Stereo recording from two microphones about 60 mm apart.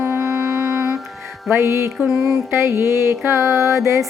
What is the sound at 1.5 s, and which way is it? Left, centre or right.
Music, right.